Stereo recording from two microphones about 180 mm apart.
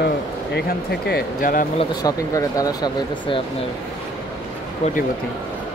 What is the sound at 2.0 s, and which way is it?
Speech, 20° left (ahead or behind).